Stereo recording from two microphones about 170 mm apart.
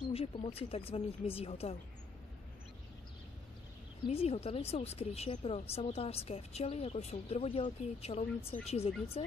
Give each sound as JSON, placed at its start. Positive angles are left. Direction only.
{"t": 0.1, "sound": "speech", "side_deg": 35}
{"t": 4.1, "sound": "speech", "side_deg": 35}